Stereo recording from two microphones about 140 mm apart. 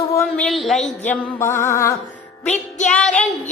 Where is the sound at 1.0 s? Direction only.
15° left (ahead or behind).